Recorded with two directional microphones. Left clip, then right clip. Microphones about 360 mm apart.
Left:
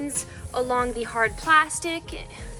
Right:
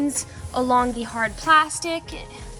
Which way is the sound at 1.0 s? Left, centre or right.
Centre.